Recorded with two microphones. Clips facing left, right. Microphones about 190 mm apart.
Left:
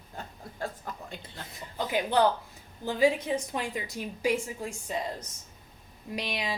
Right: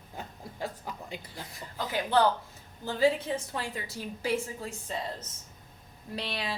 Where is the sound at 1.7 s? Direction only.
15° left (ahead or behind).